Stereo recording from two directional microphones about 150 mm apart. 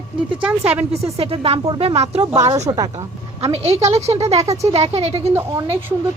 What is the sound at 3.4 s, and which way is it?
Speech, 45° right (ahead or behind).